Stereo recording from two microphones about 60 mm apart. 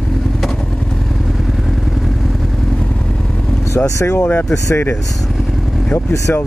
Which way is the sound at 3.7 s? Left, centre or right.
Left.